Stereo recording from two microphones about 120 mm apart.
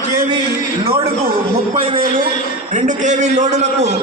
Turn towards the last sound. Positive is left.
turn(degrees=-75)  # may be behind; listen again after turning